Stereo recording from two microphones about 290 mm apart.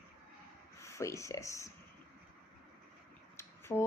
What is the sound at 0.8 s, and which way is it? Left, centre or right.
Speech, centre.